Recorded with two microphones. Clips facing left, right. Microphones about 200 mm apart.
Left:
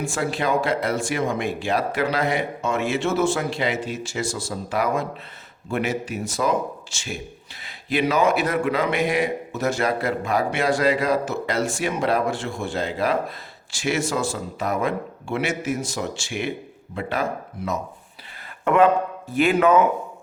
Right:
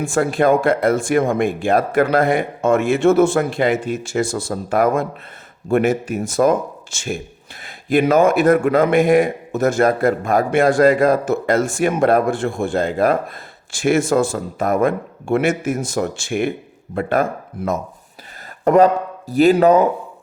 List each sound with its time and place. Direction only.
0.0 s a man's voice: 50° right (ahead or behind)
18.6 s speech: 40° right (ahead or behind)